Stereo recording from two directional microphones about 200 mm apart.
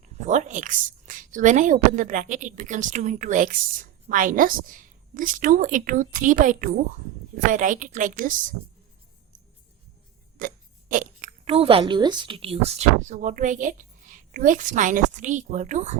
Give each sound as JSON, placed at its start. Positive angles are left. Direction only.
{"t": 0.0, "sound": "a woman's voice", "side_deg": -35}
{"t": 10.3, "sound": "burping", "side_deg": -45}
{"t": 11.5, "sound": "a woman's voice", "side_deg": -30}